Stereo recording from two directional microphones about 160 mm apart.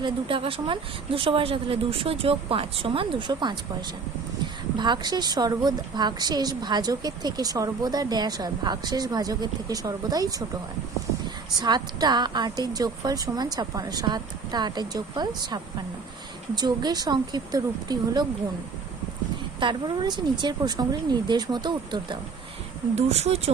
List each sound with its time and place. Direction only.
0.0 s a woman's voice: 35° right (ahead or behind)
11.6 s a woman's voice: 25° right (ahead or behind)
19.5 s a woman's voice: 30° right (ahead or behind)
23.0 s speech: 45° right (ahead or behind)